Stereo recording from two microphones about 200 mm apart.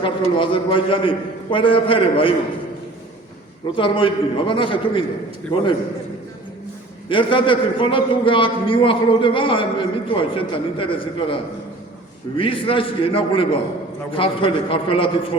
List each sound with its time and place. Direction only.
0.0 s a man's voice: 25° left (ahead or behind)
3.8 s a man's voice: 25° left (ahead or behind)
7.1 s a man's voice: 25° left (ahead or behind)
12.4 s a man's voice: 25° left (ahead or behind)